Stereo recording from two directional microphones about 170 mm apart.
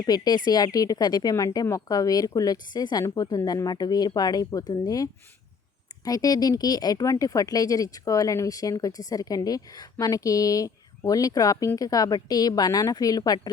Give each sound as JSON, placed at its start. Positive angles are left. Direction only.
{"t": 0.0, "sound": "speech", "side_deg": 25}
{"t": 6.1, "sound": "speech", "side_deg": 20}